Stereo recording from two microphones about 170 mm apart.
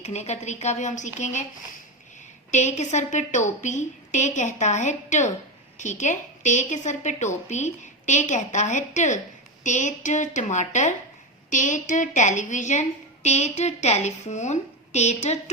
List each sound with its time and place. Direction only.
0.0 s a woman's voice: 40° left (ahead or behind)
2.5 s a woman's voice: 45° left (ahead or behind)